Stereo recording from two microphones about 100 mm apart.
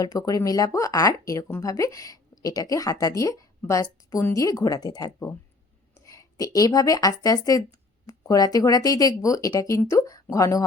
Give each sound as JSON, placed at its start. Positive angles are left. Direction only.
{"t": 0.0, "sound": "speech", "side_deg": 40}
{"t": 4.4, "sound": "speech", "side_deg": 35}